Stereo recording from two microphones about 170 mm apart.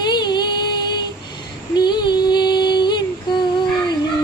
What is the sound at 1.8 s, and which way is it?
Music, 25° left (ahead or behind).